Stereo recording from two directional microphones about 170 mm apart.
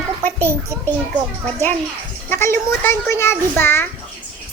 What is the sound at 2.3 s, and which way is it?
Child singing, 15° left (ahead or behind).